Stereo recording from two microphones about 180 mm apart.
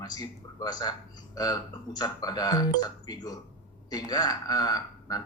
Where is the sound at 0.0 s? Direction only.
20° left (ahead or behind).